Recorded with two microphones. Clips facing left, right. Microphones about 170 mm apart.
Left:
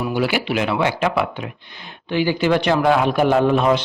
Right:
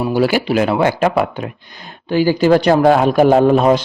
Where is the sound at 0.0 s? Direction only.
40° right (ahead or behind).